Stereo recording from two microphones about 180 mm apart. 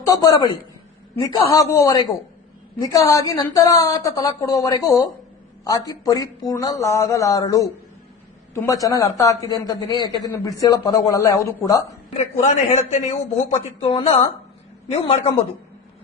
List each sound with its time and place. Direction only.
0.0 s a man's voice: 20° left (ahead or behind)
12.1 s a man's voice: 40° left (ahead or behind)